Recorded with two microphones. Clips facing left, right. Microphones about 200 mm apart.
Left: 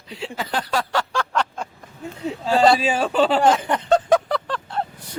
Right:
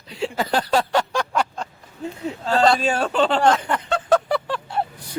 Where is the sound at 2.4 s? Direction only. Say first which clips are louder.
Left 1 dB; 5° left (ahead or behind).